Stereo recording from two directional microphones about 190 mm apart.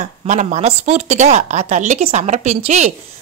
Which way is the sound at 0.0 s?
40° right (ahead or behind).